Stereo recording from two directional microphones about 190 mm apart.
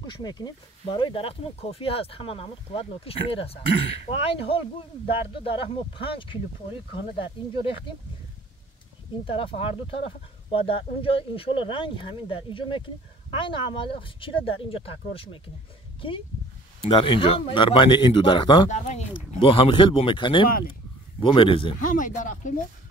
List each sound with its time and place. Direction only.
0.0 s speech: 20° left (ahead or behind)
9.2 s speech: 30° left (ahead or behind)
16.8 s speech: 25° left (ahead or behind)
21.7 s speech: 45° left (ahead or behind)